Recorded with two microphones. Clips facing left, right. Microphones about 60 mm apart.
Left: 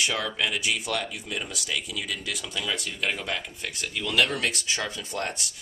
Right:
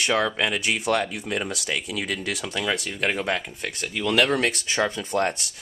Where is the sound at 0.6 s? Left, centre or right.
Right.